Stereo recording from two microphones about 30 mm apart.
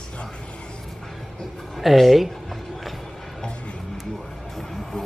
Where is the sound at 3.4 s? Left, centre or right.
Left.